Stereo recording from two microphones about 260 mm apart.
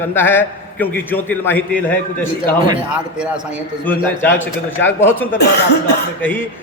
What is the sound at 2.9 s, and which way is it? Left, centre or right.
Speech, centre.